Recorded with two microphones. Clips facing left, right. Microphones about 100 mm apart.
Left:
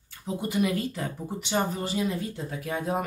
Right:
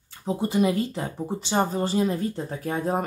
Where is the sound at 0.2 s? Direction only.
30° right (ahead or behind).